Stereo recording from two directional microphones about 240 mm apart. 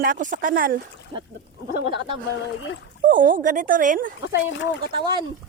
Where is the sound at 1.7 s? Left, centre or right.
Right.